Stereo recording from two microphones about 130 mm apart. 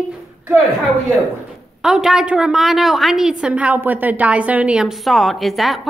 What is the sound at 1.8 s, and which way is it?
A woman's voice, 5° right (ahead or behind).